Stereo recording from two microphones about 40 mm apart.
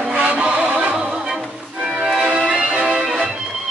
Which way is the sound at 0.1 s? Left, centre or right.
Right.